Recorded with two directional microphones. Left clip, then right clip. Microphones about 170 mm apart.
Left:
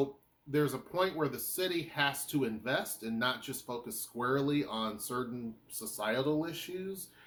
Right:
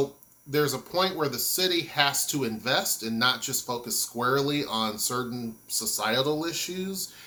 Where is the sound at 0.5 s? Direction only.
15° right (ahead or behind).